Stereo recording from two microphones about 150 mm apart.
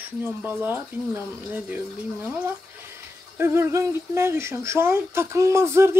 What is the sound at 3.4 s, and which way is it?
Speech, 15° right (ahead or behind).